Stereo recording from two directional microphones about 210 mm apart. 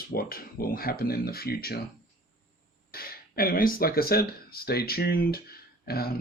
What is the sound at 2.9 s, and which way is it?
Speech, 45° left (ahead or behind).